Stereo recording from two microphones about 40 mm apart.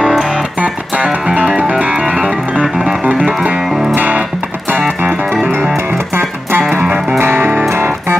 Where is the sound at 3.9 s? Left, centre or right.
Right.